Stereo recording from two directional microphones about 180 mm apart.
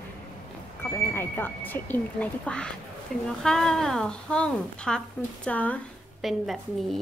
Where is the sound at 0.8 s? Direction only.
10° left (ahead or behind).